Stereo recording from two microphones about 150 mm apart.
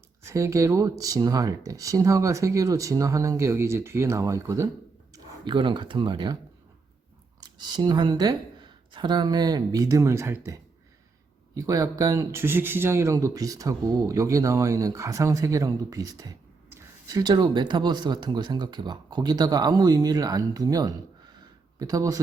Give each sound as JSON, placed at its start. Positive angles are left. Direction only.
{"t": 0.2, "sound": "speech", "side_deg": -20}
{"t": 5.1, "sound": "speech", "side_deg": -30}
{"t": 7.4, "sound": "speech", "side_deg": -30}